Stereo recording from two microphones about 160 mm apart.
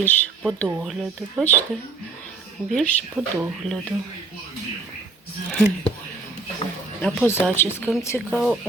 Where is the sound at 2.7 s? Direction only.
5° left (ahead or behind).